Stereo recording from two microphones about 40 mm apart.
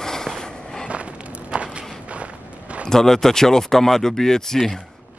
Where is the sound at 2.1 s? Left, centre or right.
Right.